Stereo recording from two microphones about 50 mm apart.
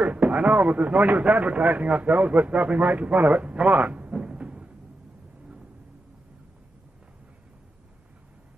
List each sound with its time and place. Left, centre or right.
0.0 s a man's voice: right